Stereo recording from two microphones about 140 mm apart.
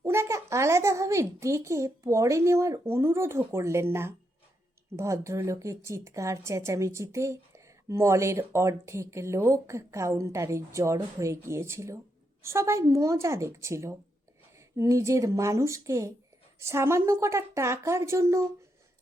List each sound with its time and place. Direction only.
0.0 s a woman's voice: 20° right (ahead or behind)